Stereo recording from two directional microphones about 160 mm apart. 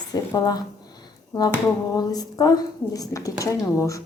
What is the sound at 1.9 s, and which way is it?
Speech, 25° left (ahead or behind).